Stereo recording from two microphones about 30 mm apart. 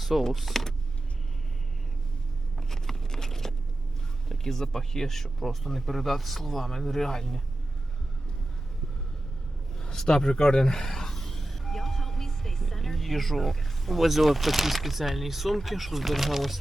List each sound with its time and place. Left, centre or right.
0.0 s speech: centre
0.5 s power windows: centre
2.6 s a sound: centre
4.3 s speech: centre
10.1 s speech: left; by 16.3 s centre